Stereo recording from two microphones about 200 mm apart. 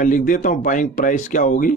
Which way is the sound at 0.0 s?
40° left (ahead or behind).